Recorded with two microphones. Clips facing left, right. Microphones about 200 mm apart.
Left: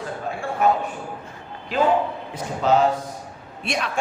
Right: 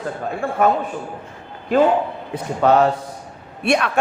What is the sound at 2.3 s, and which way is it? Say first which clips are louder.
A man's voice: right 4 dB; 60° right (ahead or behind).